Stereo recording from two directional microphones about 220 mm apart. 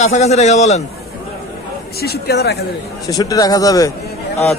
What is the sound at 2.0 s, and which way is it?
Speech, 45° left (ahead or behind).